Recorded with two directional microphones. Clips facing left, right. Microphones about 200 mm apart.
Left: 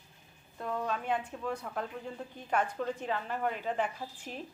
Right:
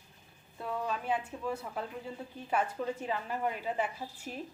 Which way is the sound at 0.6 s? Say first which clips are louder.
Left 1 dB; 5° right (ahead or behind).